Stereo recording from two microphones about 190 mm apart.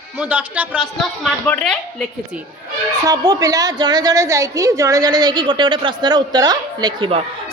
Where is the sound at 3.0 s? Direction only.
20° right (ahead or behind).